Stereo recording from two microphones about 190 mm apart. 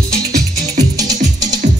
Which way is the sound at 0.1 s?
55° right (ahead or behind).